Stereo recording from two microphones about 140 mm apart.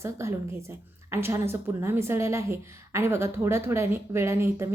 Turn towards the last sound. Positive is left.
turn(degrees=-20)  # may be behind; listen again after turning